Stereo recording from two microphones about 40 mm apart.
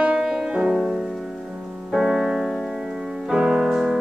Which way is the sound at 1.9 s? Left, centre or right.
Centre.